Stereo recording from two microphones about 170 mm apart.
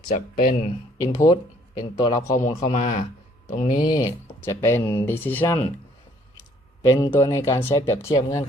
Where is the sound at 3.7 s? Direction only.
25° left (ahead or behind).